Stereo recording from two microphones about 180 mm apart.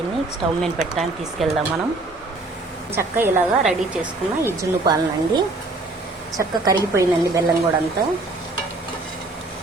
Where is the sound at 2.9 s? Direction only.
10° right (ahead or behind).